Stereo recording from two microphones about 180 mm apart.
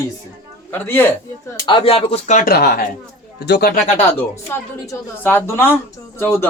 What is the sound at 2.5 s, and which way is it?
A man's voice, 60° left (ahead or behind).